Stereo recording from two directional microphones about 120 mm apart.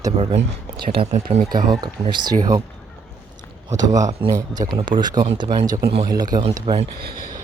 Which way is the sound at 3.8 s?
30° right (ahead or behind).